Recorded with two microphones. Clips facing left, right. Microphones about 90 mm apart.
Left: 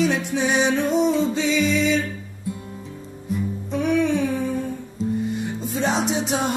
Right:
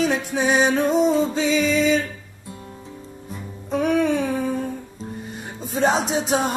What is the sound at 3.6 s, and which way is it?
Humming, 45° right (ahead or behind).